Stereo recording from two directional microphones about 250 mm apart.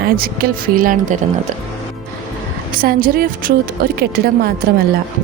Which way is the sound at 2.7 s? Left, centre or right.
Right.